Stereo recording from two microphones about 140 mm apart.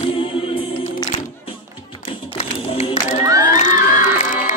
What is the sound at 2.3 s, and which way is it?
Clapping, 45° left (ahead or behind).